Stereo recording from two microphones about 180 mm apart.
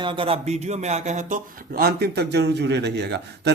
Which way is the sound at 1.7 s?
60° right (ahead or behind).